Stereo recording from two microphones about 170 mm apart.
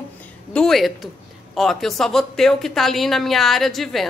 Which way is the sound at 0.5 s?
Centre (ahead or behind).